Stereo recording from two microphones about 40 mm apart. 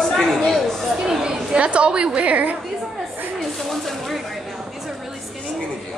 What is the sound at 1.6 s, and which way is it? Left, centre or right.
Speech, right.